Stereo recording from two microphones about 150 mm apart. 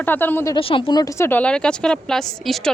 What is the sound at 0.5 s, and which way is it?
A woman's voice, 35° left (ahead or behind).